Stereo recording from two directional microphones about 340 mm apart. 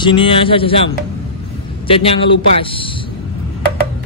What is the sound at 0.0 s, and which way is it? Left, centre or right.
Speech, centre.